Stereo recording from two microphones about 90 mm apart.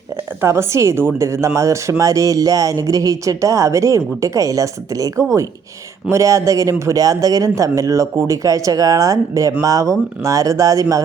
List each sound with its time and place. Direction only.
0.4 s a woman's voice: 30° right (ahead or behind)